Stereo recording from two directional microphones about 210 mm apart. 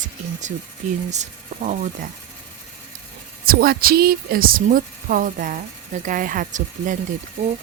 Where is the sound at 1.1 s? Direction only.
35° right (ahead or behind).